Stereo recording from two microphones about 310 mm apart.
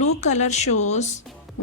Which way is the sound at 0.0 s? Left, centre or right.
Left.